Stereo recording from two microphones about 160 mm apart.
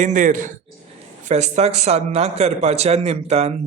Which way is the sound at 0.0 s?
55° right (ahead or behind).